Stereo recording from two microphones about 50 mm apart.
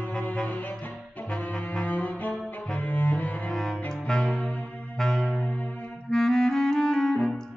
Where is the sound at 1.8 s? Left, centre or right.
Left.